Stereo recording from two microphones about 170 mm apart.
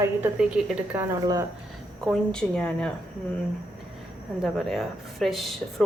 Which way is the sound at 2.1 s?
5° left (ahead or behind).